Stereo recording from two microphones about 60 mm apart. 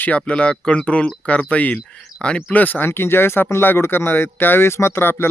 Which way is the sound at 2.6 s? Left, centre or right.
Left.